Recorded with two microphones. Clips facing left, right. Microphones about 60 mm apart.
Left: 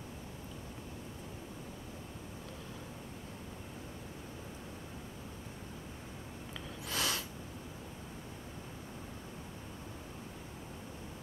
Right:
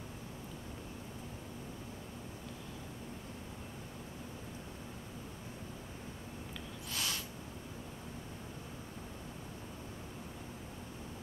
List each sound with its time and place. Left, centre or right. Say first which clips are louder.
6.9 s snort: left 4 dB; left